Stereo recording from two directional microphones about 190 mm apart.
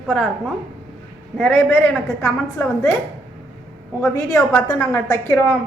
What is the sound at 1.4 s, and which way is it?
A woman's voice, 10° left (ahead or behind).